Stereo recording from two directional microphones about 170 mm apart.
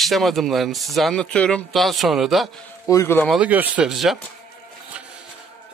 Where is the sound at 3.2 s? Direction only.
5° right (ahead or behind).